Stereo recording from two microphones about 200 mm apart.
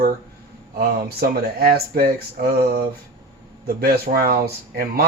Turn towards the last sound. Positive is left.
turn(degrees=-50)  # may be behind; listen again after turning